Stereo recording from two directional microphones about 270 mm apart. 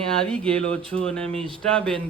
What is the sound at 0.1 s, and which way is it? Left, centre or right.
Speech, centre.